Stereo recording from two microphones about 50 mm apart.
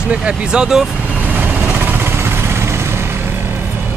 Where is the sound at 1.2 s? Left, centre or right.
Right.